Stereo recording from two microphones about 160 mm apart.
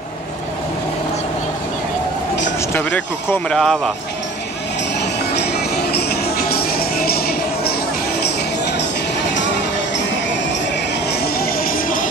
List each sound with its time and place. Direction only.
2.7 s speech: 10° left (ahead or behind)
5.3 s music: 90° left; by 7.7 s 75° left (ahead or behind)
11.1 s music: 70° left (ahead or behind)